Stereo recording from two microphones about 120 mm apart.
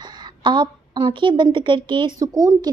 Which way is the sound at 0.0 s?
35° right (ahead or behind).